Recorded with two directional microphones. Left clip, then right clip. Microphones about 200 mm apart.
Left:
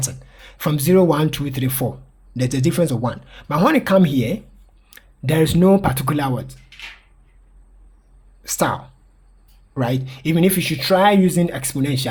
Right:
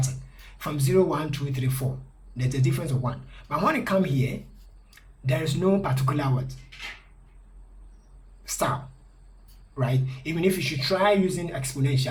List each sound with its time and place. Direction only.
0.0 s speech: 55° left (ahead or behind)
8.4 s speech: 60° left (ahead or behind)
9.7 s speech: 60° left (ahead or behind)